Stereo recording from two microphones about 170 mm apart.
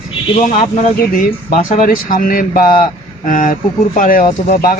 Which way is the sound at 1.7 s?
50° left (ahead or behind).